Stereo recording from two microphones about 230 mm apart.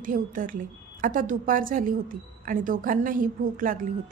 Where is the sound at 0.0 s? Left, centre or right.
Right.